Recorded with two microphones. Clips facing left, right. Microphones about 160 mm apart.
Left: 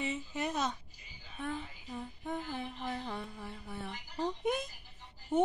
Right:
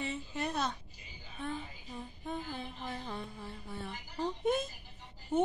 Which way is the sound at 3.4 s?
15° left (ahead or behind).